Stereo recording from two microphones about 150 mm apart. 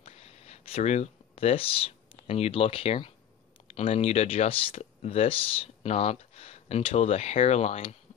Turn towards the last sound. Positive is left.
turn(degrees=40)  # may be behind; listen again after turning